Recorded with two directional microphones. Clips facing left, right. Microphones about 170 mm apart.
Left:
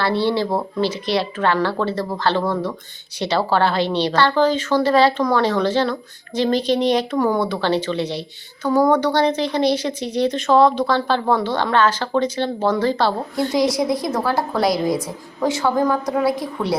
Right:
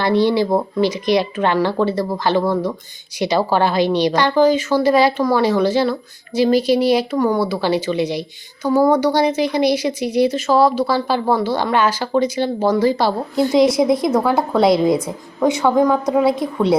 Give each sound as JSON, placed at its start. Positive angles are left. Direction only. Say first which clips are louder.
{"t": 0.0, "sound": "a woman's voice", "louder": "right 4 dB", "side_deg": -15}